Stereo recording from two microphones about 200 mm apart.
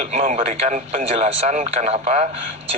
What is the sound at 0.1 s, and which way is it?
Speech, 30° right (ahead or behind).